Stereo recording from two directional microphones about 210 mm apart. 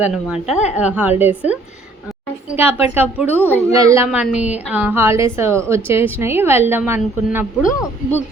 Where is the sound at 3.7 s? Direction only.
15° right (ahead or behind).